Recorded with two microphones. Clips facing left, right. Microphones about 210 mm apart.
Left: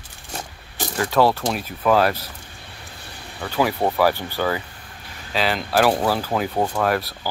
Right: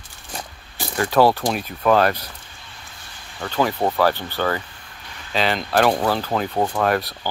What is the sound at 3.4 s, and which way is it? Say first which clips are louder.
Speech: even; 10° left (ahead or behind).